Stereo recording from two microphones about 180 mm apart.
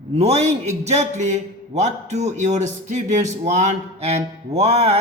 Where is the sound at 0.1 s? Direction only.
35° right (ahead or behind).